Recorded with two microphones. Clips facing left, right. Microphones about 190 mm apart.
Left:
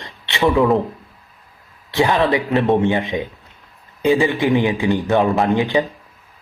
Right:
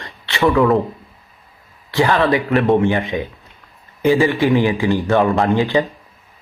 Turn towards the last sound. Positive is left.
turn(degrees=15)  # may be behind; listen again after turning